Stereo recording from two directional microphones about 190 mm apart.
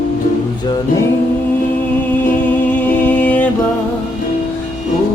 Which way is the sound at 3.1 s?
10° left (ahead or behind).